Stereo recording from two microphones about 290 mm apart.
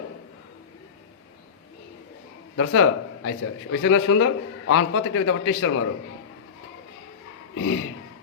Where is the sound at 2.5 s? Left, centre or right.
Left.